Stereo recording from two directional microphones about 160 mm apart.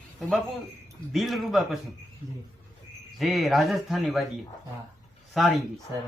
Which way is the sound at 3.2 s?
Centre (ahead or behind).